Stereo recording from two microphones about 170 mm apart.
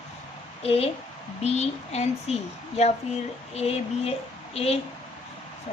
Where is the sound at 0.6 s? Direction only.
35° left (ahead or behind).